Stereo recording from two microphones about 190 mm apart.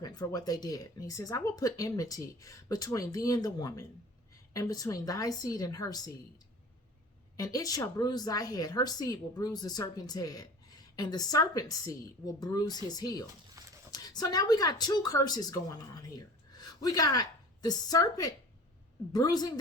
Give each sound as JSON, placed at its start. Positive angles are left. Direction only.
{"t": 0.0, "sound": "a woman's voice", "side_deg": 20}
{"t": 7.3, "sound": "a woman's voice", "side_deg": 20}
{"t": 13.6, "sound": "horse", "side_deg": -20}
{"t": 13.9, "sound": "a woman's voice", "side_deg": 20}